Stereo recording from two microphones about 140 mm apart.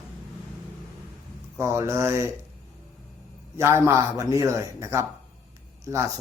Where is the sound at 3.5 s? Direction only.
20° right (ahead or behind).